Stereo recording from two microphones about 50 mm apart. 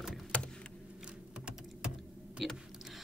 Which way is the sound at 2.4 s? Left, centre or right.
Centre.